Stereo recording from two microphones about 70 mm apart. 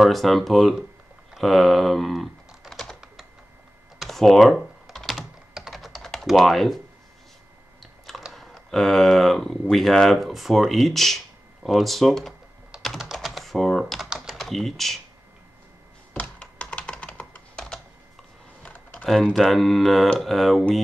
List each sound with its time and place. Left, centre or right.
0.0 s speech: centre
1.3 s typing: centre
8.3 s speech: centre
12.7 s typing: centre
16.1 s computer keyboard: centre
19.3 s speech: centre